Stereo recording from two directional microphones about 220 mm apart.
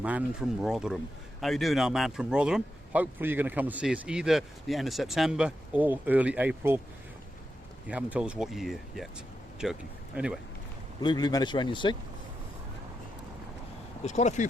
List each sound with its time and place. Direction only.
0.0 s speech: 5° right (ahead or behind)
7.9 s speech: 5° right (ahead or behind)
11.0 s speech: 20° left (ahead or behind)
14.0 s speech: 30° left (ahead or behind)